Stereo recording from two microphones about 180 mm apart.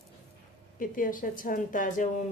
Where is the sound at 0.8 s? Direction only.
50° left (ahead or behind).